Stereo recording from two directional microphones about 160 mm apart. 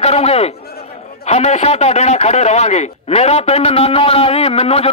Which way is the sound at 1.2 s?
45° left (ahead or behind).